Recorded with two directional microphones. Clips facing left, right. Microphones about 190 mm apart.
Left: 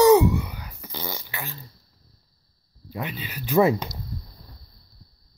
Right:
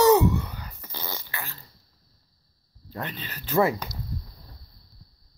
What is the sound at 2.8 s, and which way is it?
Speech, 10° left (ahead or behind).